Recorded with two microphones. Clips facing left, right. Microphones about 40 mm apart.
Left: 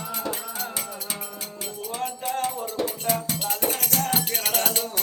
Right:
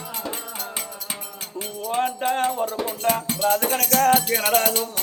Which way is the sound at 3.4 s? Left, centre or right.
Right.